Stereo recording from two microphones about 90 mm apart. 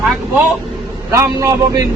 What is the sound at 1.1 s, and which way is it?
Speech, 35° right (ahead or behind).